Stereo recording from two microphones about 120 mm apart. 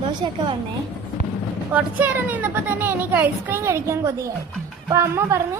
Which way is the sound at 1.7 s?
15° right (ahead or behind).